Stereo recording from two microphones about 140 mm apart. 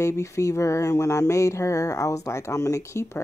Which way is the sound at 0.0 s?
20° left (ahead or behind).